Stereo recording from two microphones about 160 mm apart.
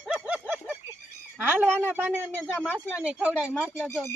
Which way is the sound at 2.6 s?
5° right (ahead or behind).